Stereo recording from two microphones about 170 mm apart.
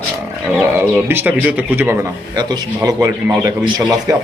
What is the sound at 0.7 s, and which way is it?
A man's voice, 10° right (ahead or behind).